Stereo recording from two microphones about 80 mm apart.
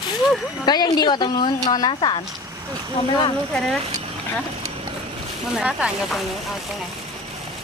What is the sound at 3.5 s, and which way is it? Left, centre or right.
Speech, centre.